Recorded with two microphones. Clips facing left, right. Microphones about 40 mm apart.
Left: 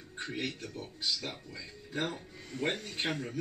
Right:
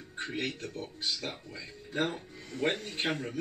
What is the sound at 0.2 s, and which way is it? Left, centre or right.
Speech, right.